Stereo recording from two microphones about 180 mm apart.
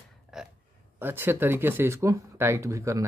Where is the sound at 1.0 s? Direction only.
10° right (ahead or behind).